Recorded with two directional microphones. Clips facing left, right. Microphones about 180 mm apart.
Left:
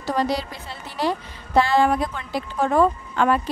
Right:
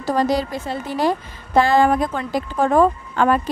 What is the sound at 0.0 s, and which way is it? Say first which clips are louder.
A woman's voice: right 4 dB; 45° right (ahead or behind).